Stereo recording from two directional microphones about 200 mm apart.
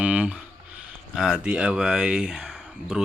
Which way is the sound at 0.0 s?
5° right (ahead or behind).